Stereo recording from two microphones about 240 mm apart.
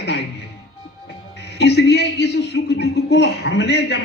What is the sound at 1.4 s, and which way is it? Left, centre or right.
A man's voice, left.